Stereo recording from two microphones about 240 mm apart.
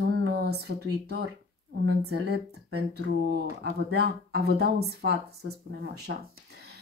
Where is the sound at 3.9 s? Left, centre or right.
Right.